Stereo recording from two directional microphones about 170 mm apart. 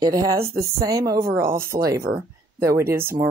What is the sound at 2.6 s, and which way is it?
Speech, 15° right (ahead or behind).